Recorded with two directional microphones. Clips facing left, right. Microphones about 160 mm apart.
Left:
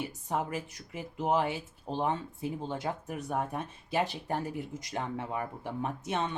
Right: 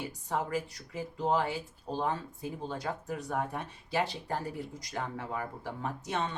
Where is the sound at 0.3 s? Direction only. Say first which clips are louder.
Right 1 dB; 20° left (ahead or behind).